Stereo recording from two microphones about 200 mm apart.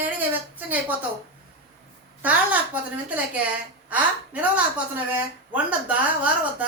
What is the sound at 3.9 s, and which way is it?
A woman's voice, 5° right (ahead or behind).